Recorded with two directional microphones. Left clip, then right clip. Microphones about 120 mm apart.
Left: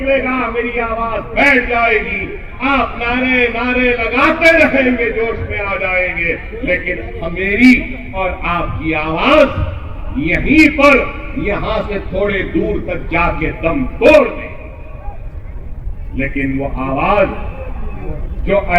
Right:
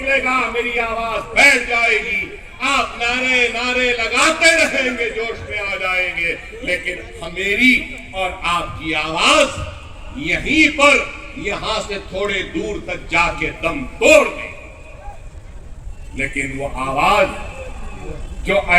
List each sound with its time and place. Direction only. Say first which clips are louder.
0.0 s a man's voice: left 2 dB; 45° right (ahead or behind)
16.2 s a man's voice: left 3 dB; 45° right (ahead or behind)
18.4 s a man's voice: left 1 dB; 45° right (ahead or behind)